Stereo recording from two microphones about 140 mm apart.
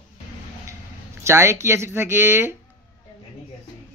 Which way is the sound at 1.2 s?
20° right (ahead or behind).